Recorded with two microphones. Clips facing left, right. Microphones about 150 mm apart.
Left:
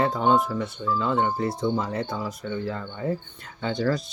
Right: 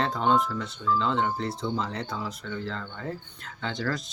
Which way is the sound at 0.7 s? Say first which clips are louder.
Even; 20° left (ahead or behind).